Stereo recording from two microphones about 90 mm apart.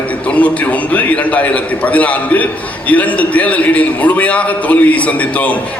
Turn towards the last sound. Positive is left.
turn(degrees=15)  # may be behind; listen again after turning